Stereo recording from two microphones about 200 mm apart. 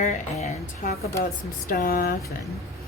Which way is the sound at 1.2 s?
45° left (ahead or behind).